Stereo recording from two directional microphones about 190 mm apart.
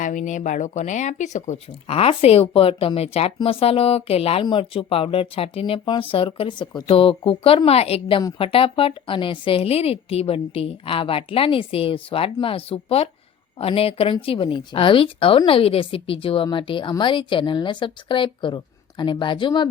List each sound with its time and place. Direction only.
0.0 s speech: 40° left (ahead or behind); by 19.6 s 25° left (ahead or behind)